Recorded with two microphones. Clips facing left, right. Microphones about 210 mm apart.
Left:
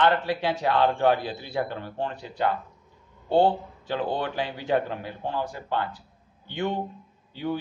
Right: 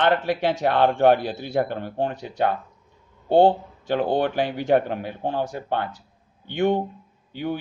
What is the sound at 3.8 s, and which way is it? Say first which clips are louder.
A man's voice: right 6 dB; 65° right (ahead or behind).